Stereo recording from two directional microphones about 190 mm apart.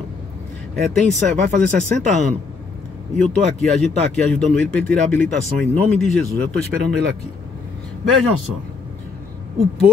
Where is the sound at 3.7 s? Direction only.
5° left (ahead or behind).